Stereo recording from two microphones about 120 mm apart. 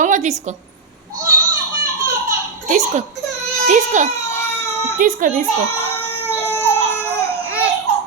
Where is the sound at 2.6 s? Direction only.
90° right.